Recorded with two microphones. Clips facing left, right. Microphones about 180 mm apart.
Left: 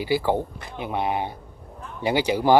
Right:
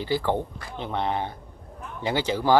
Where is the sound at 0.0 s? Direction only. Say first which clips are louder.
Left 3 dB; 10° left (ahead or behind).